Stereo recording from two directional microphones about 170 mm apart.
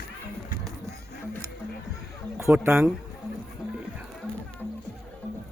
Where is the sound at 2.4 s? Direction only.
15° right (ahead or behind).